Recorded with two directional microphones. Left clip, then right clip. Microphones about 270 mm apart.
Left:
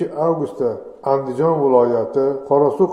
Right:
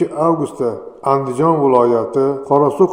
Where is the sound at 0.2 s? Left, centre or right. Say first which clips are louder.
Even; right.